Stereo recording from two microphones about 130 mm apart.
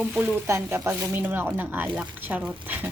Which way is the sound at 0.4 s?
20° right (ahead or behind).